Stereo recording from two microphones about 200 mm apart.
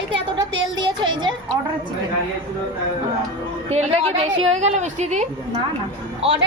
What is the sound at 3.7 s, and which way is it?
Speech, 35° right (ahead or behind).